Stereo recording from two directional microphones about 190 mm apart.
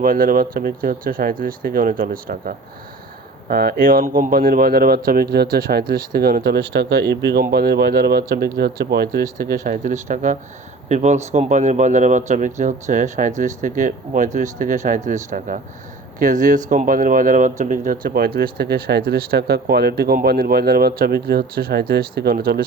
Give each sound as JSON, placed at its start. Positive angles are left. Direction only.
{"t": 0.0, "sound": "speech", "side_deg": -45}
{"t": 9.6, "sound": "speech", "side_deg": -45}